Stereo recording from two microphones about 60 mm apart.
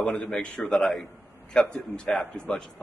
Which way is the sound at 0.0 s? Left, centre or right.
Left.